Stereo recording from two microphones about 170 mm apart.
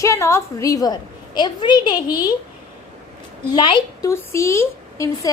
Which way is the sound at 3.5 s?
25° left (ahead or behind).